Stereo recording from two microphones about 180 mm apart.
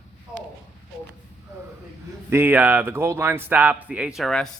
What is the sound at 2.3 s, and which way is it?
A man's voice, 10° right (ahead or behind).